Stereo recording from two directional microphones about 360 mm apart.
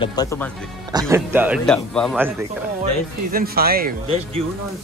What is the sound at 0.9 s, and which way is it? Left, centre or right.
Speech, centre.